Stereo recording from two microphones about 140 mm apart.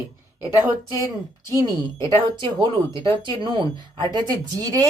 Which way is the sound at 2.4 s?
35° right (ahead or behind).